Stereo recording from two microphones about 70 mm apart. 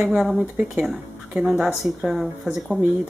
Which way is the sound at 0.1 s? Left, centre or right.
Centre.